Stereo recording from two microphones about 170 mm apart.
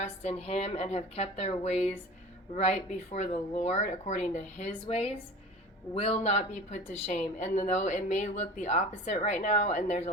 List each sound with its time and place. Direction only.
0.2 s speech: 40° left (ahead or behind)